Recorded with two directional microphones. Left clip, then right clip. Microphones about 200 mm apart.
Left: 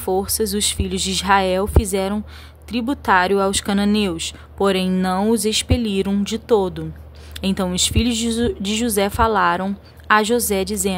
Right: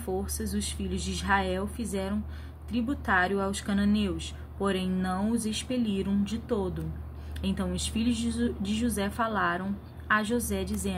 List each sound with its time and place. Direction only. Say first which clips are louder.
0.0 s speech: left 14 dB; 55° left (ahead or behind)